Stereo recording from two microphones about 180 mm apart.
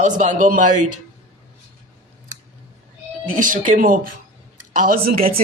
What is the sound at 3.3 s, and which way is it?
Speech, 45° right (ahead or behind).